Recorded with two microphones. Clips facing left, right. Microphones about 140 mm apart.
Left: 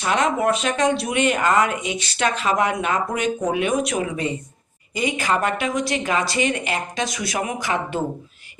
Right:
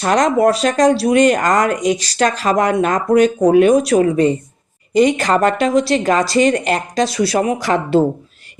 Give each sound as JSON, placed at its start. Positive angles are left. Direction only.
{"t": 0.0, "sound": "speech", "side_deg": -40}
{"t": 8.0, "sound": "speech", "side_deg": -75}